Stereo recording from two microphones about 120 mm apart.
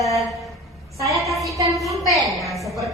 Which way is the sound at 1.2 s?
Centre (ahead or behind).